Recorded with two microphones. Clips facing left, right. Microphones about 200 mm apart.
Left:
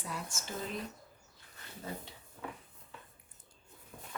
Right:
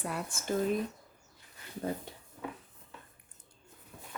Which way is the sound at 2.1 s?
50° right (ahead or behind).